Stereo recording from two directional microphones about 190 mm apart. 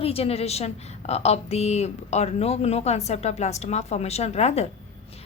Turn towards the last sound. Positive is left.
turn(degrees=35)  # may be behind; listen again after turning